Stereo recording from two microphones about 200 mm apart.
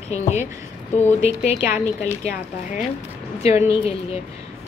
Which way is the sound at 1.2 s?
35° left (ahead or behind).